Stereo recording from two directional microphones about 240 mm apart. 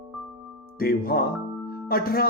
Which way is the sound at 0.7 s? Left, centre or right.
Left.